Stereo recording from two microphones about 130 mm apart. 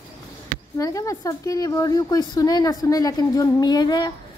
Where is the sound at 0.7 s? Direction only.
25° left (ahead or behind).